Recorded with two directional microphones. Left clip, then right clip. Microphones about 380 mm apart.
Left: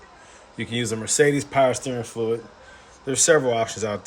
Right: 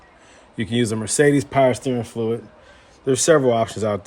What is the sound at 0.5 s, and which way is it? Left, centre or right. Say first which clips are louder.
Speech: right 4 dB; centre.